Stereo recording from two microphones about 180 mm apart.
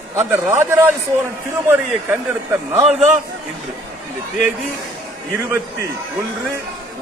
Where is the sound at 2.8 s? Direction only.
40° right (ahead or behind).